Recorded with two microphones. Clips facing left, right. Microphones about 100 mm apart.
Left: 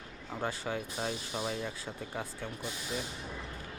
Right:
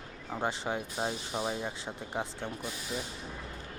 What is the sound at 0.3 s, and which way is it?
Speech, 25° right (ahead or behind).